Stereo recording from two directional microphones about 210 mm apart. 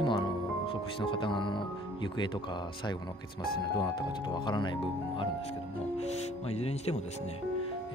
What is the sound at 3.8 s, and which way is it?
Speech, 20° left (ahead or behind).